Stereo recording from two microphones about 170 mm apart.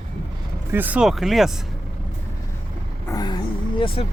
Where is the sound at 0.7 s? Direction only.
10° right (ahead or behind).